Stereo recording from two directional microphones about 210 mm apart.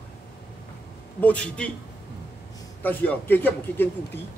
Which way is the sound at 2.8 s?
10° left (ahead or behind).